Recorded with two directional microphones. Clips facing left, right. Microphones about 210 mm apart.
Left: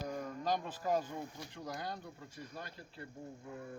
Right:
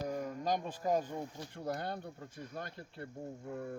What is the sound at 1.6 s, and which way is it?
Speech, 55° right (ahead or behind).